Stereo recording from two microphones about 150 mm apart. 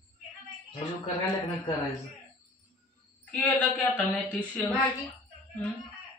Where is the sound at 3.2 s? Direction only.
10° left (ahead or behind).